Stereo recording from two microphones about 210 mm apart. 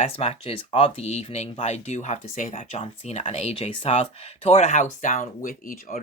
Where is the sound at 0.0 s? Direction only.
30° left (ahead or behind).